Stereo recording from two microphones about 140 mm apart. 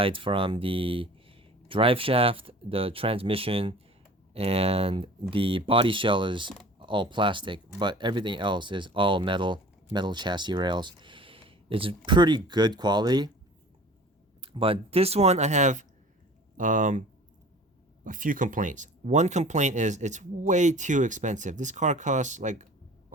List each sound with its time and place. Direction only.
0.0 s speech: 40° right (ahead or behind)
14.4 s speech: 40° right (ahead or behind); by 17.0 s 65° right (ahead or behind)
18.0 s speech: 70° right (ahead or behind)